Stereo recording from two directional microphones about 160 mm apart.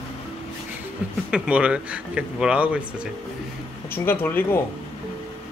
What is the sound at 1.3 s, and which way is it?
Speech, 5° right (ahead or behind).